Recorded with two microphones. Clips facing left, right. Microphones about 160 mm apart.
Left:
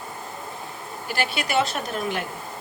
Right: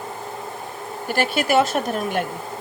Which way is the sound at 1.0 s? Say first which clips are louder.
Right 6 dB; 50° right (ahead or behind).